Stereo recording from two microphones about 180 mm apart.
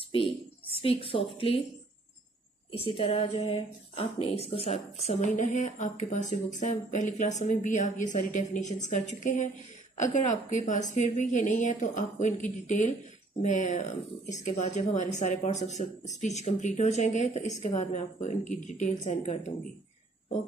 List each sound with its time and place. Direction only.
1.1 s speech: 30° left (ahead or behind)
2.8 s a woman's voice: 30° left (ahead or behind)